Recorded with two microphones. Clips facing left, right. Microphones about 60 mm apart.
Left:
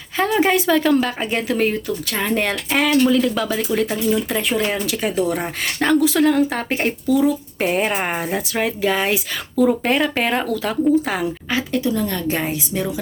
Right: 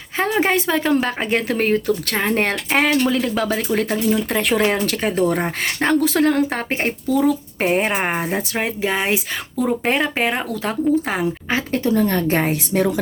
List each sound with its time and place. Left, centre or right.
0.2 s a woman's voice: right
1.0 s speech: right; by 10.5 s centre
10.5 s speech: right